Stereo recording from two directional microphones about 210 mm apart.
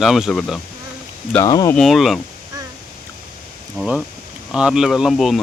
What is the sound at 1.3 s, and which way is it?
Speech, 15° left (ahead or behind).